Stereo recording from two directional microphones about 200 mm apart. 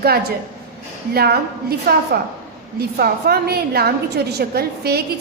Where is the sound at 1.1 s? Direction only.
50° right (ahead or behind).